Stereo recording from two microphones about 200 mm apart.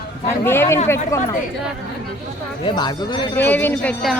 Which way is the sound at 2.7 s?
20° left (ahead or behind).